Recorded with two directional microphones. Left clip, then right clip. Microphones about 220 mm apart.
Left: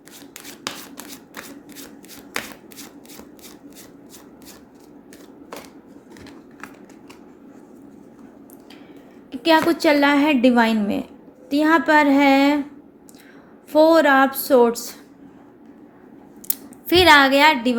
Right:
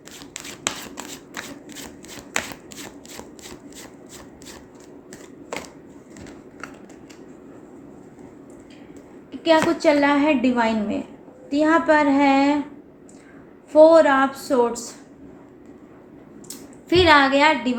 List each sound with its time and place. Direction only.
5.5 s a sound: centre (ahead or behind)
9.6 s a woman's voice: 50° left (ahead or behind)
13.7 s a woman's voice: 50° left (ahead or behind)
16.9 s a woman's voice: 50° left (ahead or behind)